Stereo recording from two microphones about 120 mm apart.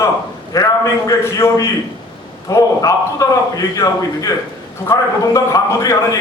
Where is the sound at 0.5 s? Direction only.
30° left (ahead or behind).